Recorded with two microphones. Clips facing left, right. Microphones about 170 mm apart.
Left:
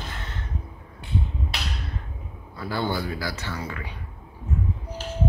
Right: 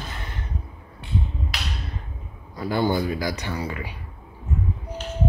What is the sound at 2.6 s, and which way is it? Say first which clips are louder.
A man's voice: right 5 dB; 15° right (ahead or behind).